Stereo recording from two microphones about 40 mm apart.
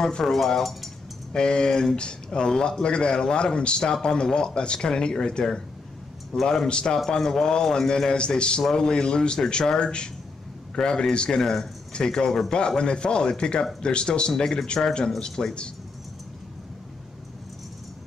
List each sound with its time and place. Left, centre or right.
0.2 s speech: centre
1.3 s a man's voice: left